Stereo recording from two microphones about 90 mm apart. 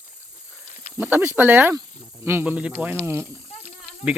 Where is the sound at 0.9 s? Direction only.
30° right (ahead or behind).